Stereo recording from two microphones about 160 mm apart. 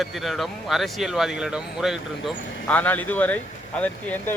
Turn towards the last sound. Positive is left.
turn(degrees=10)  # may be behind; listen again after turning